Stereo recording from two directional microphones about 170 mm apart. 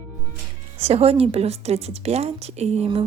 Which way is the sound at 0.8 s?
35° right (ahead or behind).